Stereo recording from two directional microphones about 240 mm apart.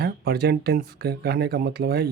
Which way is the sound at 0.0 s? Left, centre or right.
Right.